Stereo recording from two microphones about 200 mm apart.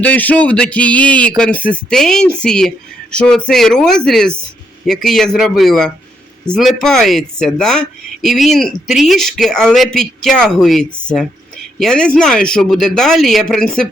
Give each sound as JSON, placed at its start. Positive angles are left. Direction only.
{"t": 0.0, "sound": "speech", "side_deg": 10}